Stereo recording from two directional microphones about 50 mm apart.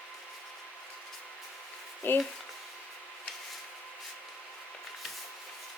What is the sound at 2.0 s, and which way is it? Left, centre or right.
Speech, left.